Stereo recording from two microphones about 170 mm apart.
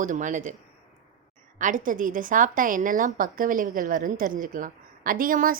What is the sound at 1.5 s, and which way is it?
Speech, 50° right (ahead or behind).